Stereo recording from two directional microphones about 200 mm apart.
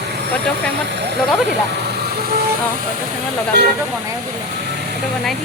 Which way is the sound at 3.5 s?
55° right (ahead or behind).